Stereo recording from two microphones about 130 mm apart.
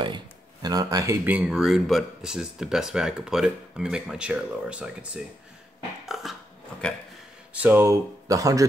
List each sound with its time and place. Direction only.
0.0 s speech: 35° right (ahead or behind)
1.3 s speech: 5° right (ahead or behind)
6.0 s dog: centre (ahead or behind)
7.5 s speech: 15° right (ahead or behind)